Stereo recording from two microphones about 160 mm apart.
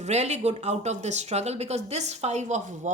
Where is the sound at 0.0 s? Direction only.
45° right (ahead or behind).